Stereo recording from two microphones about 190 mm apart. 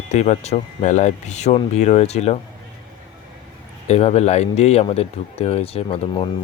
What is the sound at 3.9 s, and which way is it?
Speech, 35° left (ahead or behind).